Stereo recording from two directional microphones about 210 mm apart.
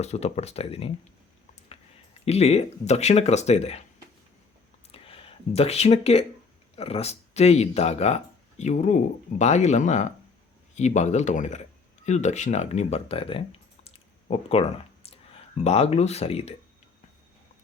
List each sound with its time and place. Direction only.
0.0 s speech: 30° left (ahead or behind)
2.2 s speech: 30° left (ahead or behind)
4.9 s a sound: 25° left (ahead or behind)
6.7 s speech: 30° left (ahead or behind)